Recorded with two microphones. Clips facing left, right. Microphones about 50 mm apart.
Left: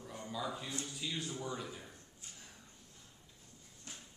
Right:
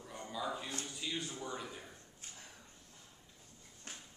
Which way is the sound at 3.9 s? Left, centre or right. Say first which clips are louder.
Right 2 dB; right.